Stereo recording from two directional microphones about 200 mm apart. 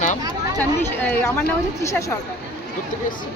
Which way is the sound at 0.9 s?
10° left (ahead or behind).